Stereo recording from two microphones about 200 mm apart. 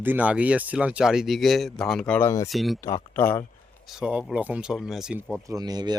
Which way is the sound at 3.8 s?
5° right (ahead or behind).